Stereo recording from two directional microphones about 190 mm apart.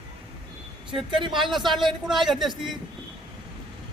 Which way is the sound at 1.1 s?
25° right (ahead or behind).